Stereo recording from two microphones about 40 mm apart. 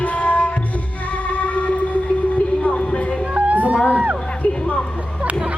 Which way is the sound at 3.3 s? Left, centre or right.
Right.